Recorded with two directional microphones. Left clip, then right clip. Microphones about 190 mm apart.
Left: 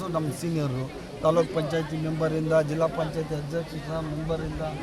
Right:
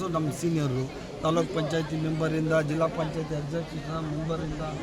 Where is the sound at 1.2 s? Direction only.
Centre (ahead or behind).